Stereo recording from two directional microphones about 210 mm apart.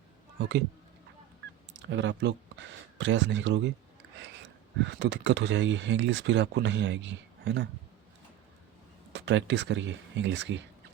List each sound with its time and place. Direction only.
1.8 s speech: 60° right (ahead or behind)
4.9 s speech: 55° right (ahead or behind)
9.1 s speech: 55° right (ahead or behind)